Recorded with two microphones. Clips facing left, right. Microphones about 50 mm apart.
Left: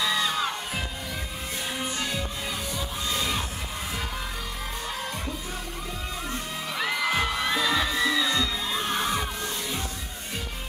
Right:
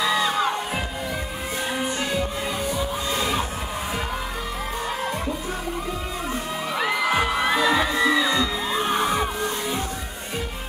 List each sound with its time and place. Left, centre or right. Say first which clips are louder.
0.0 s music: right 5 dB; centre
1.8 s music: right 5 dB; centre
6.7 s music: right 4 dB; centre